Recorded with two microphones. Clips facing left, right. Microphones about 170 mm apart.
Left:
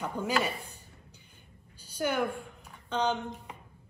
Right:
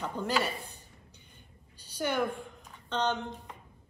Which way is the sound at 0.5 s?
65° left (ahead or behind).